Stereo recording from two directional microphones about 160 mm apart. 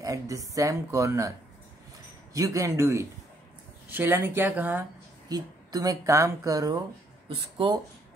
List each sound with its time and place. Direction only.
0.0 s speech: 20° right (ahead or behind)
2.3 s speech: 20° right (ahead or behind)
5.3 s speech: 20° right (ahead or behind)